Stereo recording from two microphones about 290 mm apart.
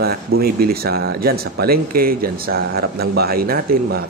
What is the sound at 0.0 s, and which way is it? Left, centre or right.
Speech, right.